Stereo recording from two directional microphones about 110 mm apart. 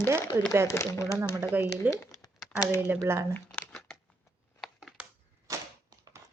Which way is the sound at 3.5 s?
5° left (ahead or behind).